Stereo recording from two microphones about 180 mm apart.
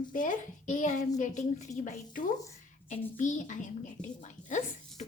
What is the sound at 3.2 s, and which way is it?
A child's voice, 45° left (ahead or behind).